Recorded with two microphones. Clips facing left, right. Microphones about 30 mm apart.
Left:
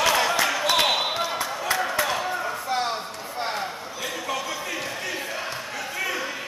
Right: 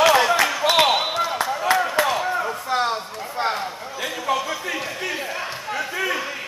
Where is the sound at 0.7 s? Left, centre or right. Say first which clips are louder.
Right 6 dB; centre.